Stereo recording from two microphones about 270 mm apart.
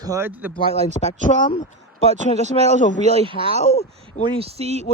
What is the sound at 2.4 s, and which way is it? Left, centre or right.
A man's voice, right.